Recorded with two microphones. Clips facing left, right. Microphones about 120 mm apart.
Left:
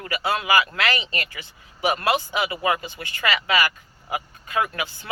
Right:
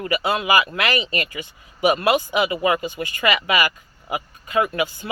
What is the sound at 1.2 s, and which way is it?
Speech, 45° right (ahead or behind).